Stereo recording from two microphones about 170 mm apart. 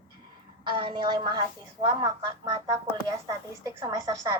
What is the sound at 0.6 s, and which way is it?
A woman's voice, 30° right (ahead or behind).